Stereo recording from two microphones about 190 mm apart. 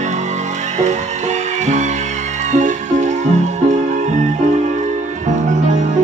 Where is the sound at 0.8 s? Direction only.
40° right (ahead or behind).